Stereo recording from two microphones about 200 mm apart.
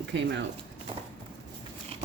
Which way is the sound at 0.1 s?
65° right (ahead or behind).